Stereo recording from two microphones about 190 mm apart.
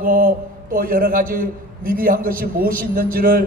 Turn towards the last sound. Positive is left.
turn(degrees=-50)  # may be behind; listen again after turning